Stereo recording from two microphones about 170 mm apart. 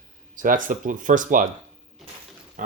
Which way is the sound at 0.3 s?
50° right (ahead or behind).